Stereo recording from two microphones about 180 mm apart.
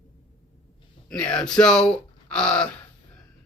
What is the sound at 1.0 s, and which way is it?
Speech, 5° left (ahead or behind).